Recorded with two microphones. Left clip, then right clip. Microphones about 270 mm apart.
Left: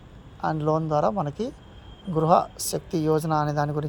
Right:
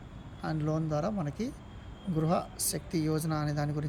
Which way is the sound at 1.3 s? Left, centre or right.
Centre.